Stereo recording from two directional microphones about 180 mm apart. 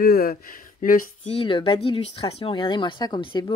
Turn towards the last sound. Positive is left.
turn(degrees=25)  # may be behind; listen again after turning